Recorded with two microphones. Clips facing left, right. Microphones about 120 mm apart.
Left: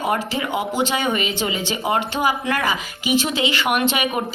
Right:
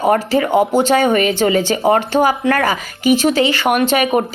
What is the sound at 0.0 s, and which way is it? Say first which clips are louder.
Speech: right 8 dB; 45° right (ahead or behind).